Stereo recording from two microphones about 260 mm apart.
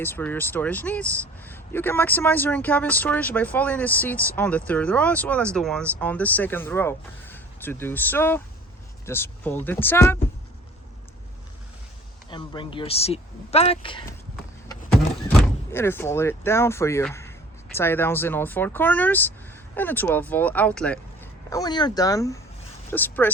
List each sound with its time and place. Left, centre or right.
0.0 s speech: centre
12.3 s speech: centre
15.4 s speech: centre
21.5 s speech: centre